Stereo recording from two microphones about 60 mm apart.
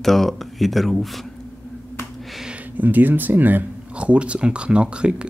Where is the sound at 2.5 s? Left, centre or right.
Right.